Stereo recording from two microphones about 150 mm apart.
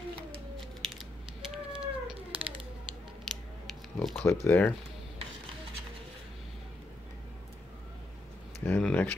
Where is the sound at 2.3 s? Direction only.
10° right (ahead or behind).